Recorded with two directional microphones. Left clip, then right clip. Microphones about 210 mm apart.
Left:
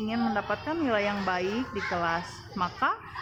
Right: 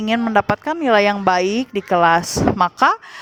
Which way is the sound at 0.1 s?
45° right (ahead or behind).